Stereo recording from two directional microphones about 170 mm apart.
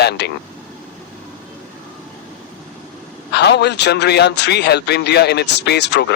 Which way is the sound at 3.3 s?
80° left.